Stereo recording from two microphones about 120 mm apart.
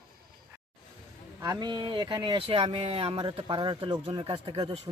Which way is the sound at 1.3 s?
30° right (ahead or behind).